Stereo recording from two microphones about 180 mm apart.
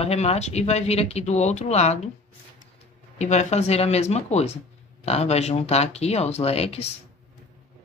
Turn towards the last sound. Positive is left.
turn(degrees=35)  # may be behind; listen again after turning